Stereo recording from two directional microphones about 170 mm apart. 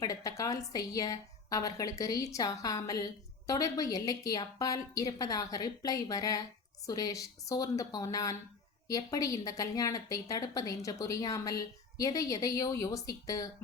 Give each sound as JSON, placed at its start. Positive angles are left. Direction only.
{"t": 0.0, "sound": "a woman's voice", "side_deg": 20}